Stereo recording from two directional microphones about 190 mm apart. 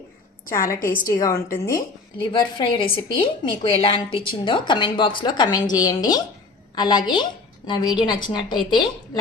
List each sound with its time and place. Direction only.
0.8 s a woman's voice: 45° left (ahead or behind)
1.0 s a woman's voice: 15° left (ahead or behind)